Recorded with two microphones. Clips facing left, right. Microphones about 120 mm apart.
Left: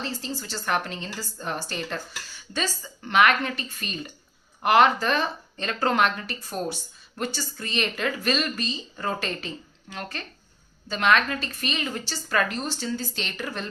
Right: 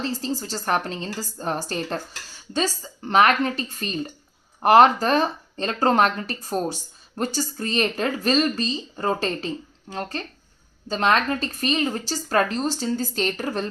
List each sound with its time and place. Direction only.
0.0 s a woman's voice: 40° right (ahead or behind)